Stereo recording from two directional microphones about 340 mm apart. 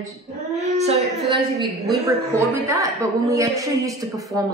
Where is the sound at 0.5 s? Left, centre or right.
Centre.